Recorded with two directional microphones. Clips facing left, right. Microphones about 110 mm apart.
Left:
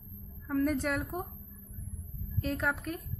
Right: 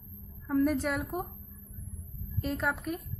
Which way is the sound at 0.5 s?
5° right (ahead or behind).